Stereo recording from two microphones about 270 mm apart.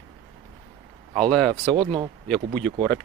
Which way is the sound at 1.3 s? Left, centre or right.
Centre.